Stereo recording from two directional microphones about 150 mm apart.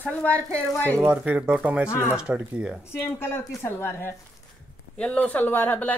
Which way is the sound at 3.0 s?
15° left (ahead or behind).